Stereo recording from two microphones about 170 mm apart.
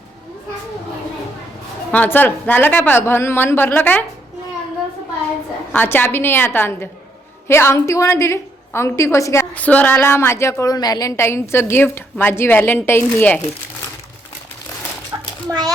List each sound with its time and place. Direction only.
1.9 s a woman's voice: 10° left (ahead or behind)
5.7 s a woman's voice: 10° left (ahead or behind)
15.4 s a child's voice: 20° right (ahead or behind)